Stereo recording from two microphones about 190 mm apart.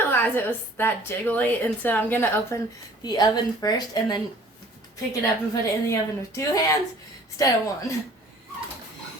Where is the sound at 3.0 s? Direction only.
20° left (ahead or behind).